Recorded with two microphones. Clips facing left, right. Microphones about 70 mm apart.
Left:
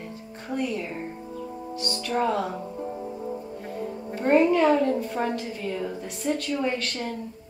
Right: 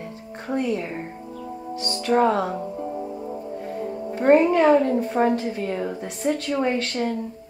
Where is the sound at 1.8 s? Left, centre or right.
Right.